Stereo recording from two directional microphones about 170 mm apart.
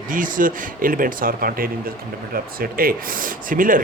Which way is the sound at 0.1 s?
50° right (ahead or behind).